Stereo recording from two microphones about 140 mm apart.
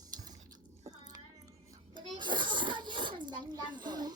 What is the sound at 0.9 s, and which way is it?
Chewing, 30° right (ahead or behind).